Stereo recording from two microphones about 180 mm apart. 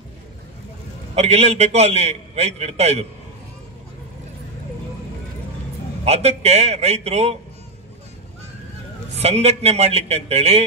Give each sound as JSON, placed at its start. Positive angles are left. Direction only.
{"t": 1.1, "sound": "a man's voice", "side_deg": -35}
{"t": 6.0, "sound": "a man's voice", "side_deg": -35}
{"t": 9.2, "sound": "a man's voice", "side_deg": -35}